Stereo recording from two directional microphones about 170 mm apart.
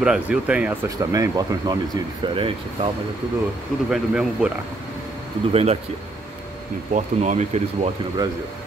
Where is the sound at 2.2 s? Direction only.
30° right (ahead or behind).